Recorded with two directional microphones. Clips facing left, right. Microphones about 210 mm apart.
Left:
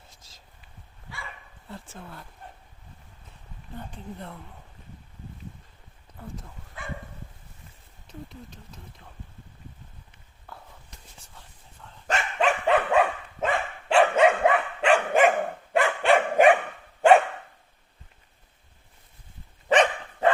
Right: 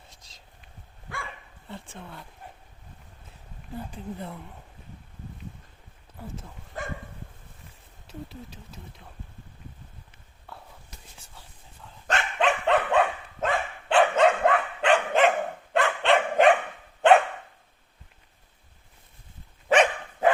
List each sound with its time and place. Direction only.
0.1 s a sound: 5° left (ahead or behind)
1.6 s speech: centre (ahead or behind)
3.8 s speech: 5° right (ahead or behind)
6.1 s speech: centre (ahead or behind)
6.8 s dog: 40° right (ahead or behind)
8.0 s speech: 5° right (ahead or behind)
10.5 s a sound: centre (ahead or behind)
11.3 s whispering: 5° right (ahead or behind)
12.0 s dog: centre (ahead or behind)
19.6 s dog: centre (ahead or behind)